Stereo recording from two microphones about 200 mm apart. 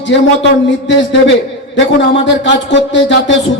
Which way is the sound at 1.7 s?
65° left (ahead or behind).